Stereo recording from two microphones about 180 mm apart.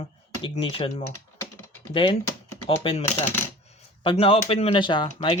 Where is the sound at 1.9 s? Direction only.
30° left (ahead or behind).